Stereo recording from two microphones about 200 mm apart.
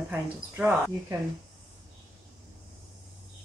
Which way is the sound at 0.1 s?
10° right (ahead or behind).